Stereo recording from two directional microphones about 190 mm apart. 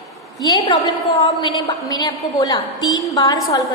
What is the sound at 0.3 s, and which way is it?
A woman's voice, 20° left (ahead or behind).